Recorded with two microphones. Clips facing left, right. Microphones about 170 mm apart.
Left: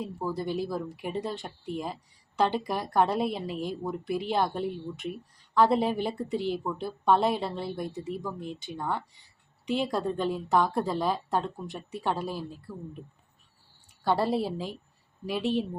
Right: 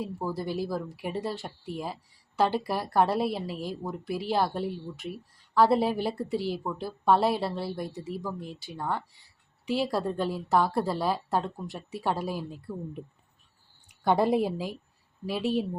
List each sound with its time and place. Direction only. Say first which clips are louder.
0.0 s speech: even; 5° right (ahead or behind)
12.7 s a woman's voice: right 4 dB; 20° right (ahead or behind); by 15.6 s 5° right (ahead or behind)